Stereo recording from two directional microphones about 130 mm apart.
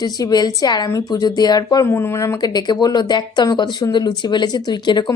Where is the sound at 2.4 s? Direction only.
30° left (ahead or behind).